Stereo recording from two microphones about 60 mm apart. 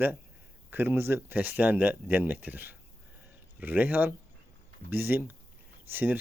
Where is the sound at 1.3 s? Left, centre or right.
Right.